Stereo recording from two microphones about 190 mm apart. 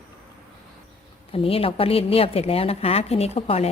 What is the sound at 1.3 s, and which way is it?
A woman's voice, 30° left (ahead or behind).